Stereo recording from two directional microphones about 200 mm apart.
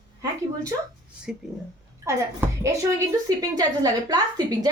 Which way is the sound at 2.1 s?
15° right (ahead or behind).